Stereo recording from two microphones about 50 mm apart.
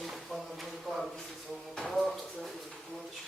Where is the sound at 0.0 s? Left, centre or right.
Centre.